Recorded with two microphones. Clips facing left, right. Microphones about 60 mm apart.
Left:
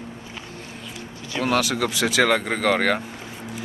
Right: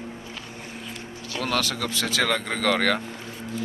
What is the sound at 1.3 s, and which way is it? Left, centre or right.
Speech, centre.